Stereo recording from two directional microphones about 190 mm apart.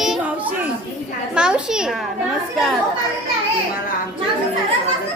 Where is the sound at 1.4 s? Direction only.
5° right (ahead or behind).